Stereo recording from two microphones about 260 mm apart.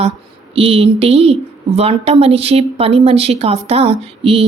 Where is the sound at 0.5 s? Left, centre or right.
Right.